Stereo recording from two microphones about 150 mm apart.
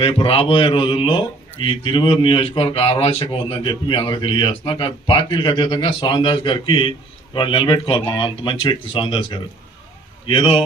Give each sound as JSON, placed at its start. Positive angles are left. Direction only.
{"t": 0.0, "sound": "a man's voice", "side_deg": 35}